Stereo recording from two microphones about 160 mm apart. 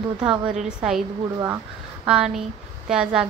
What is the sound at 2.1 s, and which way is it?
A woman's voice, 5° right (ahead or behind).